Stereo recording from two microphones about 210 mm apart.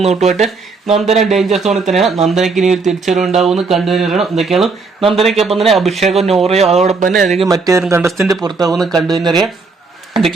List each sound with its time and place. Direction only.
0.2 s speech: centre (ahead or behind)
6.5 s speech: 30° right (ahead or behind)
7.1 s speech: centre (ahead or behind)
7.4 s speech: 15° right (ahead or behind)
8.7 s speech: centre (ahead or behind)
9.1 s speech: 20° right (ahead or behind)